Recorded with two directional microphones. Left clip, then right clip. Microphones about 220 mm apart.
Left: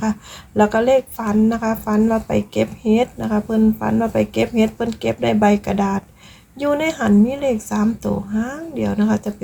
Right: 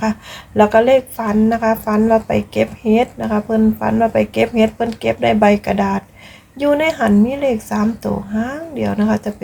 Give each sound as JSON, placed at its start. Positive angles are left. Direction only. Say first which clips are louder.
{"t": 0.0, "sound": "a woman's voice", "louder": "right 4 dB", "side_deg": 0}